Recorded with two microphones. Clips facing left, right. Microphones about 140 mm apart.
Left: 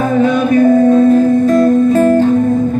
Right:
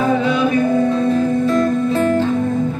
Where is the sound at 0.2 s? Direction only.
45° left (ahead or behind).